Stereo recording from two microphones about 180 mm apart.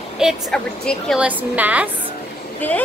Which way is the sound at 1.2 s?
10° right (ahead or behind).